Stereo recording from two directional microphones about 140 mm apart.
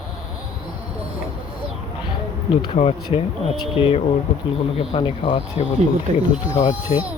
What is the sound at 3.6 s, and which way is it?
Speech, 40° left (ahead or behind).